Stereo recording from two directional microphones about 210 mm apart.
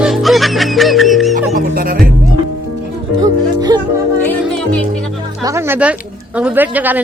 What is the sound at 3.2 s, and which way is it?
Music, 20° right (ahead or behind).